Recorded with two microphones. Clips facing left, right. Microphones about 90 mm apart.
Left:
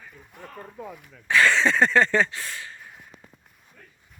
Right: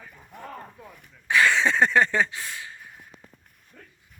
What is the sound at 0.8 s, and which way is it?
Speech, 5° left (ahead or behind).